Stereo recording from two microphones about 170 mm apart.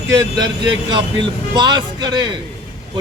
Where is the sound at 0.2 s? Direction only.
25° right (ahead or behind).